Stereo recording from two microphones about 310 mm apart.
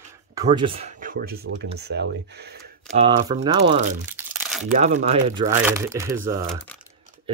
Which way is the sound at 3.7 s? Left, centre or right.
Right.